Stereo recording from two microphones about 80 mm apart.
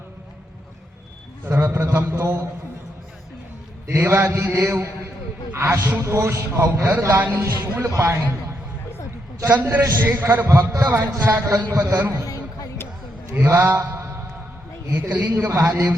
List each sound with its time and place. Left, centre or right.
1.5 s a man's voice: right
3.8 s mantra: right
5.5 s a man's voice: right
7.1 s mantra: right
7.9 s a man's voice: right
9.5 s mantra: right
10.9 s a man's voice: right
12.2 s a sound: left
13.3 s mantra: right
14.9 s mantra: centre